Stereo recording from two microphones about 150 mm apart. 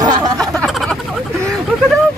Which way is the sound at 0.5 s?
Centre (ahead or behind).